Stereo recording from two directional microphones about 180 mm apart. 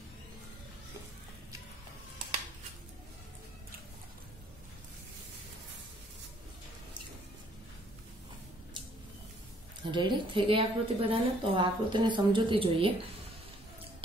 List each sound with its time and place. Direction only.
9.8 s a woman's voice: 25° right (ahead or behind)